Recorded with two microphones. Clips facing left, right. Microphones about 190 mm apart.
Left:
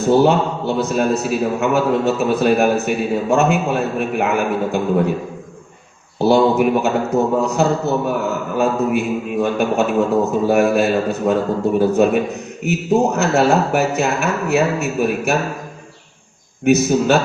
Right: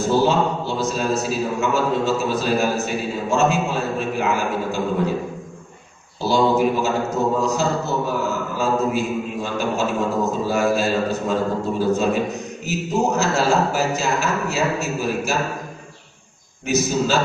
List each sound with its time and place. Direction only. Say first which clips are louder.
0.0 s a man's voice: left 4 dB; 60° left (ahead or behind)
6.1 s a man's voice: left 4 dB; 60° left (ahead or behind)
16.6 s a man's voice: left 6 dB; 60° left (ahead or behind)